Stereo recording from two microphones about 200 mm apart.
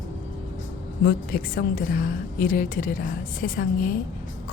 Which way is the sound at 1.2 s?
45° left (ahead or behind).